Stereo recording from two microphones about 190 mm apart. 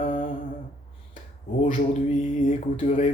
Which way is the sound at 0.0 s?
40° left (ahead or behind).